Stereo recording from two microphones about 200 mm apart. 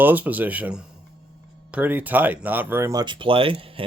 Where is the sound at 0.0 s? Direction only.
10° right (ahead or behind).